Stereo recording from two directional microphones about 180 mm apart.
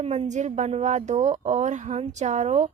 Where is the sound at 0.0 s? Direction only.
35° right (ahead or behind).